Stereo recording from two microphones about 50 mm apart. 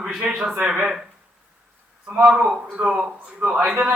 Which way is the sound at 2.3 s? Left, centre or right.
Centre.